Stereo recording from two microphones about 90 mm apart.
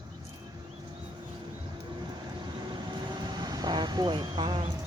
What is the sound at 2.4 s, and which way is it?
Vehicle, 60° right (ahead or behind).